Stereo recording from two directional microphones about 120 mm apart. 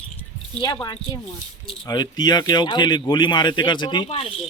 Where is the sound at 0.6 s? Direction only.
35° left (ahead or behind).